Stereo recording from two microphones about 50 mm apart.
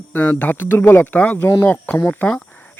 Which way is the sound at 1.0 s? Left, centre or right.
Left.